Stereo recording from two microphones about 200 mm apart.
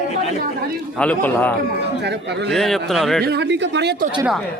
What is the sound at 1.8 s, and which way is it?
Speech, 60° right (ahead or behind).